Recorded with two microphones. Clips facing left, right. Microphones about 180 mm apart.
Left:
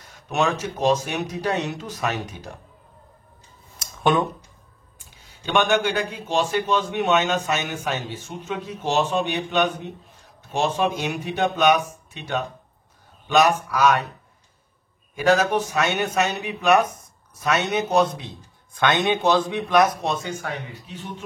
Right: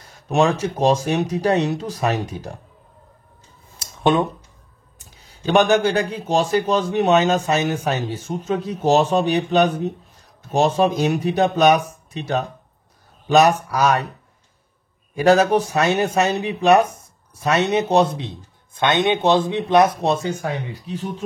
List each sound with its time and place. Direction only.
0.0 s a man's voice: 30° right (ahead or behind)
3.8 s a sound: 25° right (ahead or behind)
5.3 s a man's voice: 35° right (ahead or behind)
15.1 s a man's voice: 35° right (ahead or behind)